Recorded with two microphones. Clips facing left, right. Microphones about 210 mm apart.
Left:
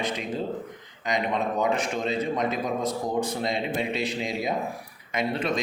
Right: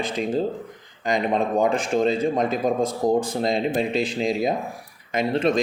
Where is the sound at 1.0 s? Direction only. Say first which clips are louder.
Right 4 dB; 30° right (ahead or behind).